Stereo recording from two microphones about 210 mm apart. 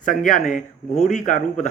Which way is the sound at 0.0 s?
40° left (ahead or behind).